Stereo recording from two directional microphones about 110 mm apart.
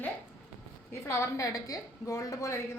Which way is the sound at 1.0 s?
25° left (ahead or behind).